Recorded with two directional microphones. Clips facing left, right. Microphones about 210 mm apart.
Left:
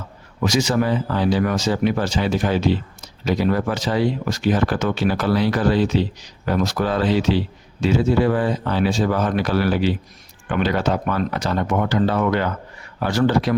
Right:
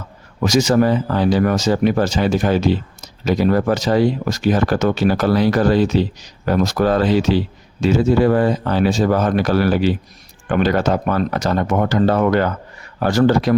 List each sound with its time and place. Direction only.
0.4 s speech: 45° right (ahead or behind)